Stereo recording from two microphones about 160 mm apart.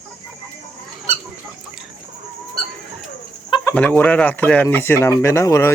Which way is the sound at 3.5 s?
30° left (ahead or behind).